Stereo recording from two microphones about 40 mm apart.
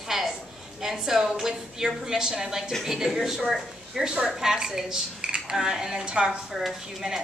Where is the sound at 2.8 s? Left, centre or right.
Centre.